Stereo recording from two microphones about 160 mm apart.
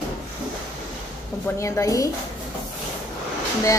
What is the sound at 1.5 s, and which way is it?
Speech, 20° left (ahead or behind).